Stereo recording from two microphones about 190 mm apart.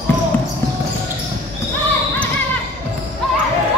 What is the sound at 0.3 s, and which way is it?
Basketball bounce, 10° left (ahead or behind).